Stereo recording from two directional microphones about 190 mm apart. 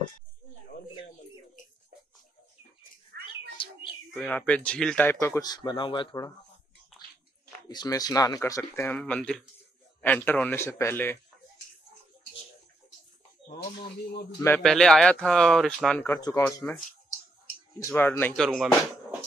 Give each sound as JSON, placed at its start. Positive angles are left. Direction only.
{"t": 3.6, "sound": "bird", "side_deg": 30}
{"t": 4.1, "sound": "speech", "side_deg": 5}
{"t": 5.2, "sound": "speech", "side_deg": 15}
{"t": 7.6, "sound": "speech", "side_deg": 20}
{"t": 14.4, "sound": "speech", "side_deg": 5}
{"t": 16.0, "sound": "speech", "side_deg": 15}
{"t": 17.8, "sound": "speech", "side_deg": 10}